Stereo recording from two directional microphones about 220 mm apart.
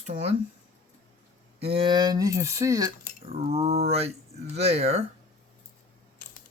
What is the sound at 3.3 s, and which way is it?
Speech, 30° right (ahead or behind).